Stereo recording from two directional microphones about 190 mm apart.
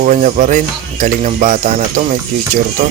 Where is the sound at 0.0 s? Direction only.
45° right (ahead or behind).